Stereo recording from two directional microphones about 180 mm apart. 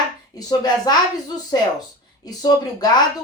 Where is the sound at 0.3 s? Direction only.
20° left (ahead or behind).